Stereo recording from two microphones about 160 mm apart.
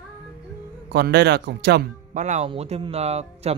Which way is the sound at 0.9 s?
90° right.